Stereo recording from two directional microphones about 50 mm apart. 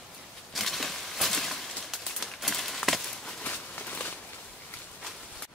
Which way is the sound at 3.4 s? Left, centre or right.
Left.